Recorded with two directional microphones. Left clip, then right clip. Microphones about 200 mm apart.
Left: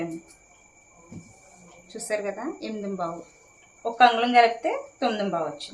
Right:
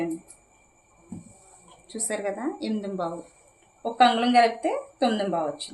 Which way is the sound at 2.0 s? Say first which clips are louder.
Even; 25° right (ahead or behind).